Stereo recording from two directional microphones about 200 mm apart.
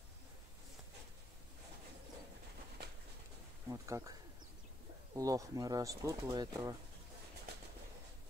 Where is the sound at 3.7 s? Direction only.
15° right (ahead or behind).